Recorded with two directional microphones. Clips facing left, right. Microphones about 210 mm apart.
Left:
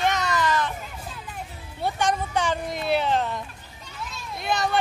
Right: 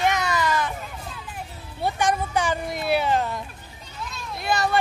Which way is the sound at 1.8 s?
10° right (ahead or behind).